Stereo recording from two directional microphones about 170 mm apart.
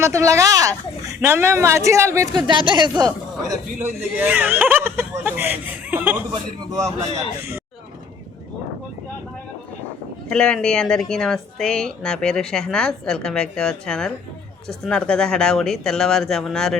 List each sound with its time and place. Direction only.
0.0 s speech: 15° right (ahead or behind)
3.5 s speech: 15° right (ahead or behind)
10.2 s a woman's voice: 5° left (ahead or behind)